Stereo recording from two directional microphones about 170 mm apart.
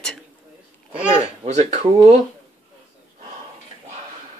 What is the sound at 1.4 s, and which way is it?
Speech, 40° right (ahead or behind).